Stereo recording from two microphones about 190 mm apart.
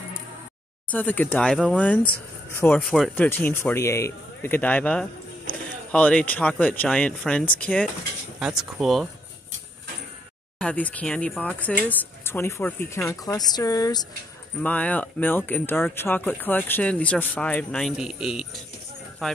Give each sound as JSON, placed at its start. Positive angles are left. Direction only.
{"t": 0.8, "sound": "speech", "side_deg": 10}
{"t": 10.6, "sound": "speech", "side_deg": 5}
{"t": 14.6, "sound": "speech", "side_deg": 10}